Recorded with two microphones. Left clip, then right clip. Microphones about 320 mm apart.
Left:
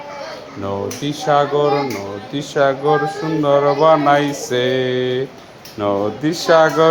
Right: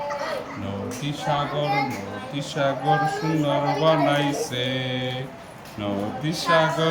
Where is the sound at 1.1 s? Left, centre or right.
Centre.